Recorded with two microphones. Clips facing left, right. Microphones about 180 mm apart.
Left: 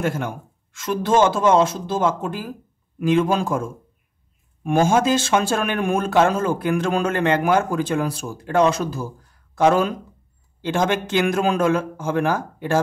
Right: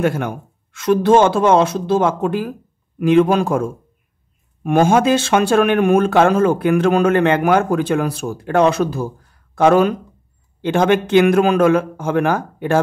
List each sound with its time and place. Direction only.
0.0 s speech: 65° right (ahead or behind)